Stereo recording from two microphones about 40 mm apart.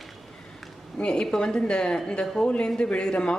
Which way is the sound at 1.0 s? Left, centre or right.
Centre.